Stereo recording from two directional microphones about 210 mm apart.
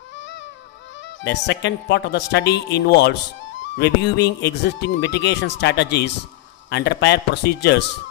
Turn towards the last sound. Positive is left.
turn(degrees=55)  # may be behind; listen again after turning